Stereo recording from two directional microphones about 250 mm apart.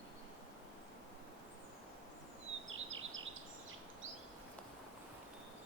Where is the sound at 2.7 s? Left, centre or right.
Right.